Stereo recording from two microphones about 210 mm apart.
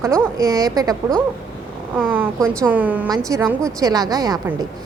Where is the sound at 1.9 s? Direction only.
5° right (ahead or behind).